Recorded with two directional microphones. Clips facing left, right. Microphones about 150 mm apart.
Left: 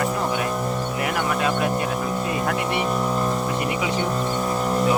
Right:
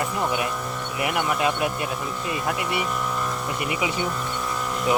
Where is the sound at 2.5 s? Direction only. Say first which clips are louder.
Left 4 dB; 35° left (ahead or behind).